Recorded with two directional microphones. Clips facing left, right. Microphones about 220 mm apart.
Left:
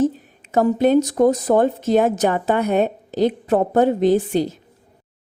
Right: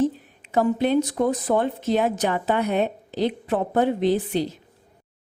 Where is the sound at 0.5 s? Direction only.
45° left (ahead or behind).